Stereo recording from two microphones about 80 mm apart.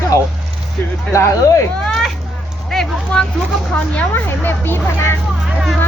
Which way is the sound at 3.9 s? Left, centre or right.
Left.